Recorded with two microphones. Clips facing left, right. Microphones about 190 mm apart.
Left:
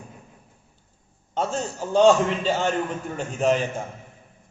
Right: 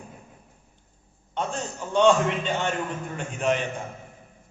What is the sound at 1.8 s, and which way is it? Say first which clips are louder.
A man's voice: left 3 dB; 35° left (ahead or behind).